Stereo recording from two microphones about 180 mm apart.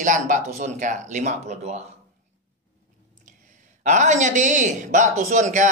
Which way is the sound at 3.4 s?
45° right (ahead or behind).